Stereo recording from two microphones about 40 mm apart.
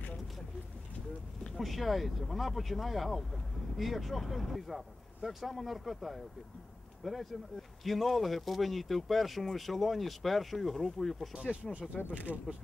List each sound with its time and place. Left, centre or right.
1.6 s speech: centre
12.1 s speech: right